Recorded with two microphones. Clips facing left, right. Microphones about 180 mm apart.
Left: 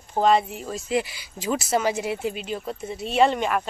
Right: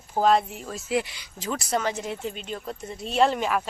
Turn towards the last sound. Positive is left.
turn(degrees=0)  # may be behind; listen again after turning